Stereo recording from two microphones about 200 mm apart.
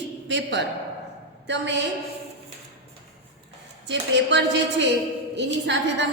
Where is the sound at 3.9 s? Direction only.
60° right (ahead or behind).